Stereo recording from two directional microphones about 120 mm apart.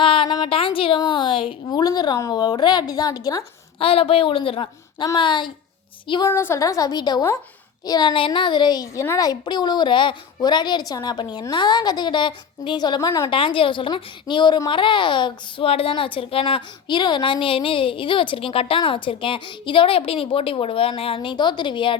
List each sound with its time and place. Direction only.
0.0 s a sound: 45° left (ahead or behind)
0.4 s a woman's voice: 50° left (ahead or behind); by 3.4 s 30° left (ahead or behind)
3.8 s a woman's voice: 50° left (ahead or behind)
6.2 s a woman's voice: 25° left (ahead or behind)
13.3 s a woman's voice: 45° left (ahead or behind)